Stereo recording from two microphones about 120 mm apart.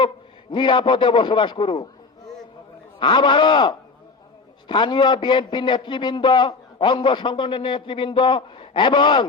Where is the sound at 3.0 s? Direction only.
40° left (ahead or behind).